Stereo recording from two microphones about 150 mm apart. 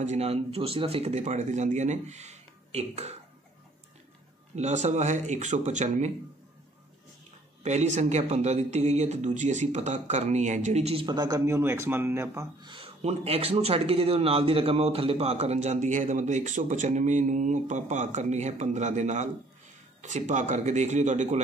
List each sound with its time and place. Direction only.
0.0 s speech: 50° right (ahead or behind)
4.6 s speech: 50° right (ahead or behind)
7.6 s speech: 50° right (ahead or behind)
11.1 s speech: 25° right (ahead or behind)
12.6 s speech: 35° right (ahead or behind); by 21.4 s 55° right (ahead or behind)